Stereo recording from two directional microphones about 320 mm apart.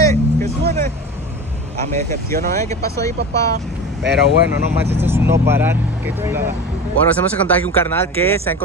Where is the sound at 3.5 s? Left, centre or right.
Right.